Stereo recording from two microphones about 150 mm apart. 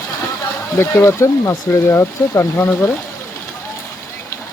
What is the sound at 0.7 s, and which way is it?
Speech, 20° left (ahead or behind).